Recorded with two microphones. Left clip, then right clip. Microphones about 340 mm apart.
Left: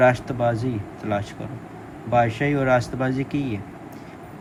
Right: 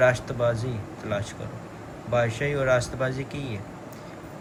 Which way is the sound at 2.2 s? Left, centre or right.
Centre.